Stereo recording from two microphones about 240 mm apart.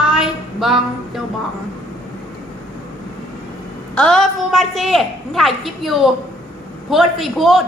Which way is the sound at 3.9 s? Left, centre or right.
Centre.